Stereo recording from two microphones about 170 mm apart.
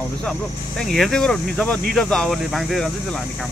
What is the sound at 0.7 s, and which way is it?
Speech, centre (ahead or behind).